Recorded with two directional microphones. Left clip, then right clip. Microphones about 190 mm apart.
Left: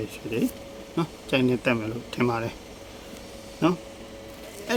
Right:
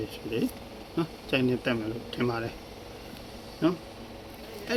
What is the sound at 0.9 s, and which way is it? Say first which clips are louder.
Speech: left 3 dB; 20° left (ahead or behind).